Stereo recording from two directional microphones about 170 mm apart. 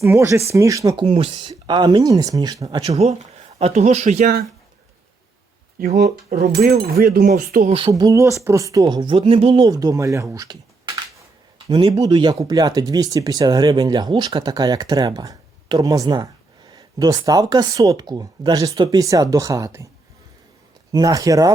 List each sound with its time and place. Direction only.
0.0 s speech: 15° right (ahead or behind)
1.0 s speech: 35° right (ahead or behind)
3.6 s a man's voice: 40° right (ahead or behind)
5.8 s speech: 65° right (ahead or behind)
7.9 s speech: 20° right (ahead or behind)
9.6 s speech: 20° right (ahead or behind)
20.9 s speech: 20° right (ahead or behind)